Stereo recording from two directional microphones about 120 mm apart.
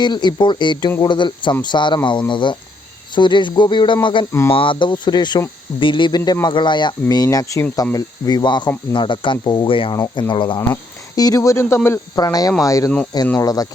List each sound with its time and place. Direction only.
0.0 s speech: 40° left (ahead or behind)
4.3 s speech: 20° left (ahead or behind)
4.5 s speech: 45° left (ahead or behind)
10.6 s speech: 25° left (ahead or behind)